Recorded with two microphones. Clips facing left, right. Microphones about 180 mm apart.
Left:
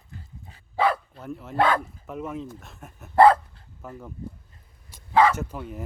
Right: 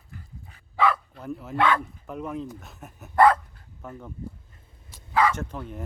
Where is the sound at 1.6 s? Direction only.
40° left (ahead or behind).